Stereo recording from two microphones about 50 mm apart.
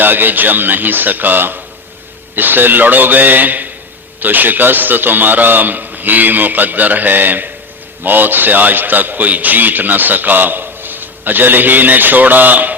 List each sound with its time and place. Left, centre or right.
0.0 s a man's voice: right